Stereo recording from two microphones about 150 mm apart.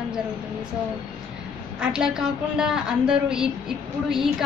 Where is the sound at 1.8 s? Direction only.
5° right (ahead or behind).